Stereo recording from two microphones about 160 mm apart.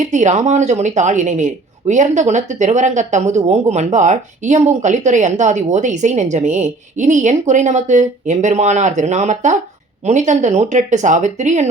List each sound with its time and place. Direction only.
0.0 s speech: 50° right (ahead or behind)